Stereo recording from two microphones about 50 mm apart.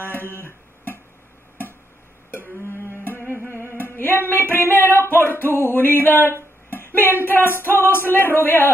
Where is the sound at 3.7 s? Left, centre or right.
Left.